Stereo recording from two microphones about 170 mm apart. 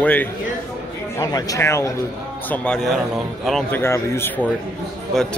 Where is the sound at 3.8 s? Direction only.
15° left (ahead or behind).